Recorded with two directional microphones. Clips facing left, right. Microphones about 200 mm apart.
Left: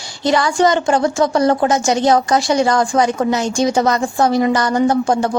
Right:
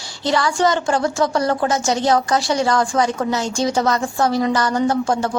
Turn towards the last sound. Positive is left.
turn(degrees=15)  # may be behind; listen again after turning